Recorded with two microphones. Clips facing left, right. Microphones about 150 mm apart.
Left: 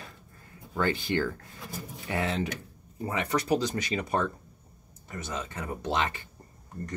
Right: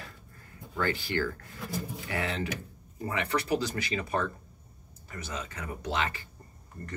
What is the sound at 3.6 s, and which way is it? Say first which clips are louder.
Speech: left 2 dB; 20° left (ahead or behind).